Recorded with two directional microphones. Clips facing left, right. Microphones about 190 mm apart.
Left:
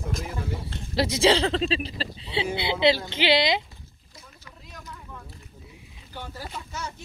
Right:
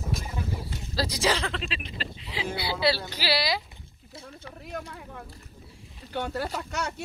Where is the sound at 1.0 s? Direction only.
25° left (ahead or behind).